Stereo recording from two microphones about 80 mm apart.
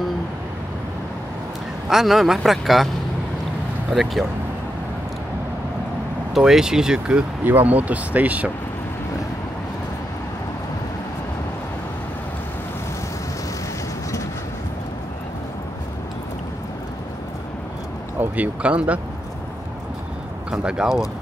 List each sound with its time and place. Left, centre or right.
1.9 s a man's voice: centre
3.9 s a man's voice: centre
6.3 s speech: centre
7.4 s speech: right
18.2 s speech: centre
20.5 s speech: centre